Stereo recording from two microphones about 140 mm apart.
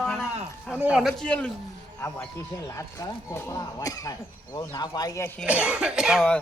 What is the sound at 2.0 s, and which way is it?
Speech, 20° left (ahead or behind).